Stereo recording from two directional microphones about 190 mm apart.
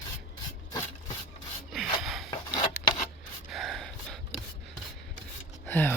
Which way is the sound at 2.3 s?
25° left (ahead or behind).